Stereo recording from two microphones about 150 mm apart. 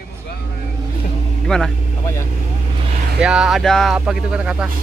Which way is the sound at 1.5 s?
5° left (ahead or behind).